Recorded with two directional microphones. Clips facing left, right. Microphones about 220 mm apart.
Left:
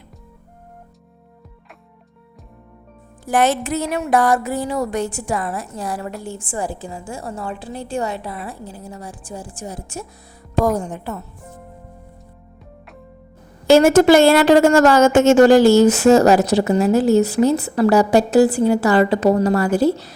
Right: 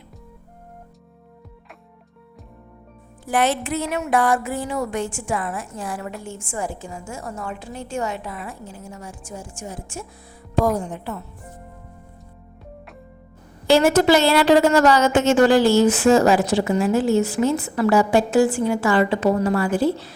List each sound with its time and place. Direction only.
3.2 s a woman's voice: 45° left (ahead or behind)
13.7 s a woman's voice: 45° left (ahead or behind)